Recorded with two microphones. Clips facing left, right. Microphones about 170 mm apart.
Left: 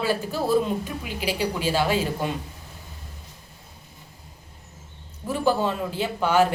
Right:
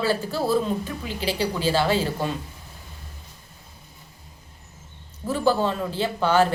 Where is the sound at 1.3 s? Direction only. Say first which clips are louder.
Right 1 dB; 35° right (ahead or behind).